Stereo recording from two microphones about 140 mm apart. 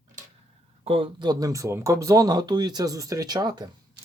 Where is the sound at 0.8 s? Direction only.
40° right (ahead or behind).